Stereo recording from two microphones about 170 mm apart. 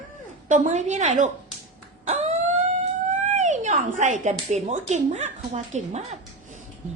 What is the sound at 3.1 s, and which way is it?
Speech, 45° right (ahead or behind).